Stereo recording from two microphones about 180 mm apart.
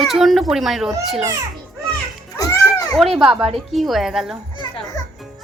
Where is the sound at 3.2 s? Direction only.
5° right (ahead or behind).